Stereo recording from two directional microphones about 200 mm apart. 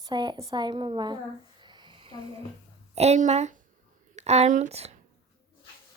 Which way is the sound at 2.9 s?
35° right (ahead or behind).